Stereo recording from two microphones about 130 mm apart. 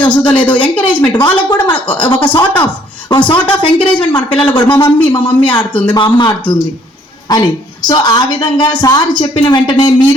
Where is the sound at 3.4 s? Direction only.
10° left (ahead or behind).